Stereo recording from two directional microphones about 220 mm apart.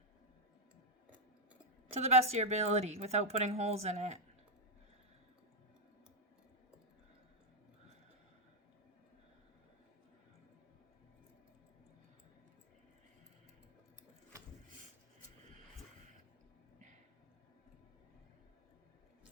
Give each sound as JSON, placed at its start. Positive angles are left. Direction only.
{"t": 1.9, "sound": "speech", "side_deg": -30}